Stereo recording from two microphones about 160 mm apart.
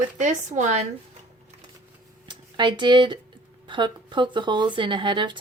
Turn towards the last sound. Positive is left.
turn(degrees=-30)  # may be behind; listen again after turning